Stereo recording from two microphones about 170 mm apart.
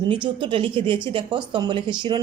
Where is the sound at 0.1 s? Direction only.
30° right (ahead or behind).